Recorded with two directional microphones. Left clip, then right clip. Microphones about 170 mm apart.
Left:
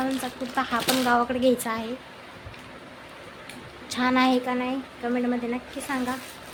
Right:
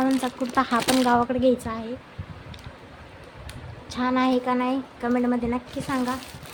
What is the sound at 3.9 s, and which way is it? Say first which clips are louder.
Speech: left 1 dB; 5° right (ahead or behind).